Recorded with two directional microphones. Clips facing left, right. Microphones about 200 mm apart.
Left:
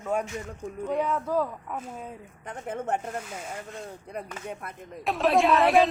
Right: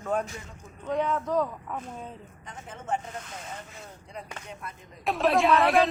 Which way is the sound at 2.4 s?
60° left (ahead or behind).